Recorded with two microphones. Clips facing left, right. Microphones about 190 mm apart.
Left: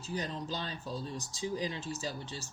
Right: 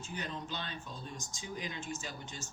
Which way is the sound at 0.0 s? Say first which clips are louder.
Left 4 dB; 35° left (ahead or behind).